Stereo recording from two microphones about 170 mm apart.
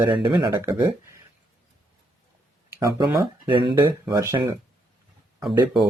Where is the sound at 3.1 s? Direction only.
25° right (ahead or behind).